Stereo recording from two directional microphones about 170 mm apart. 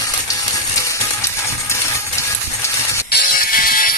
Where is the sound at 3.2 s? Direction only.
60° left (ahead or behind).